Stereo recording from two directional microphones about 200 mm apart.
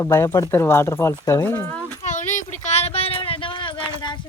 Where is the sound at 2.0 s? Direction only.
35° left (ahead or behind).